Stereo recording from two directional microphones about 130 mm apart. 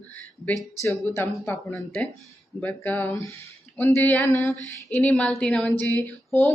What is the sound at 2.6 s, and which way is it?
Speech, 15° left (ahead or behind).